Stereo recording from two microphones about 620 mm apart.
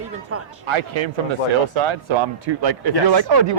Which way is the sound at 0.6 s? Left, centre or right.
Right.